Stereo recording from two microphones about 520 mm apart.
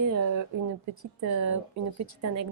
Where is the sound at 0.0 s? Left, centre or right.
Right.